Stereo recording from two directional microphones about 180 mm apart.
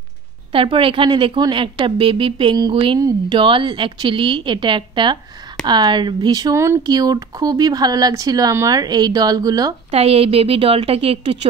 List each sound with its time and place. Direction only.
0.5 s speech: 30° right (ahead or behind)
9.8 s a woman's voice: 35° right (ahead or behind)